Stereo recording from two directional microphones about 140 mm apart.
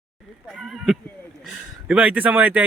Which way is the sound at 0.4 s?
Centre (ahead or behind).